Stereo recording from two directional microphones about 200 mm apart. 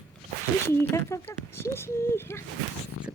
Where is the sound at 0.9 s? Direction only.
15° left (ahead or behind).